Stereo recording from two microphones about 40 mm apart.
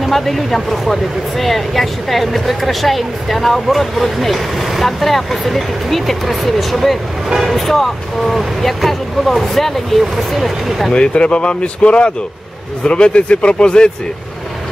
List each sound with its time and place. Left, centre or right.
0.0 s speech: centre
10.9 s speech: left